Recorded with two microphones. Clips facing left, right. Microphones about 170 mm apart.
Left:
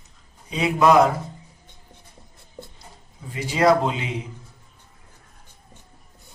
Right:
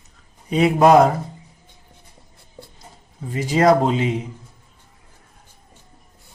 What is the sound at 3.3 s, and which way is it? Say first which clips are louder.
Speech: right 3 dB; 45° right (ahead or behind).